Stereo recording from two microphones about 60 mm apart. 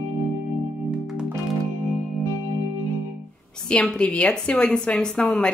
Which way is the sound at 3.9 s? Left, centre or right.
Centre.